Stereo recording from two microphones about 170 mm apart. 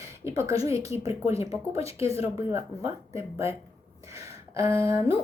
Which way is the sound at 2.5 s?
15° right (ahead or behind).